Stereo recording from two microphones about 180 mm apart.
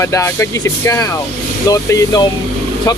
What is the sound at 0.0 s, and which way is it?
Speech, 15° left (ahead or behind).